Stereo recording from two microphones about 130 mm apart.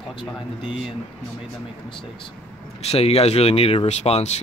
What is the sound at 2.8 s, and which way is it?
Speech, 50° left (ahead or behind).